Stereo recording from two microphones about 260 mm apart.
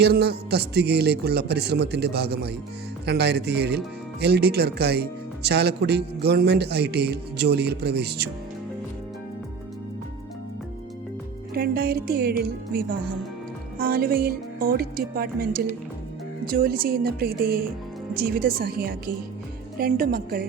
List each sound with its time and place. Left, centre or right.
0.0 s speech: right
11.5 s speech: right